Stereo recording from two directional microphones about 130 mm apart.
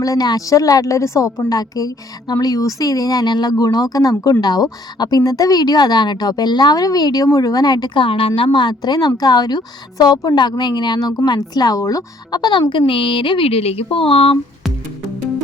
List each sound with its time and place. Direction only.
0.0 s a woman's voice: 30° left (ahead or behind); by 14.3 s 45° left (ahead or behind)